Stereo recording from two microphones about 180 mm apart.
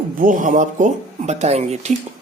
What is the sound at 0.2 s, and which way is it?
Speech, 50° right (ahead or behind).